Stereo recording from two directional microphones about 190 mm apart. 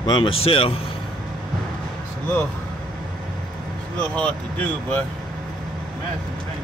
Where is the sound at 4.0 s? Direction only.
5° left (ahead or behind).